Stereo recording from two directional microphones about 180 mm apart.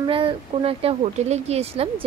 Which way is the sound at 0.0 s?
30° right (ahead or behind).